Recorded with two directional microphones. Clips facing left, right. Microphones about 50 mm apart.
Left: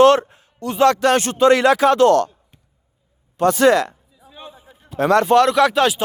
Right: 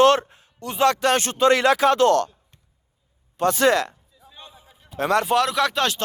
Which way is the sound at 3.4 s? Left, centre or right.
Left.